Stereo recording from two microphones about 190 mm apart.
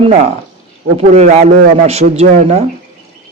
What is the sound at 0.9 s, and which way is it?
Speech, 35° right (ahead or behind).